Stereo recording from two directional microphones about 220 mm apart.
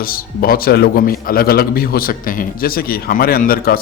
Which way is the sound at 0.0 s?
40° left (ahead or behind).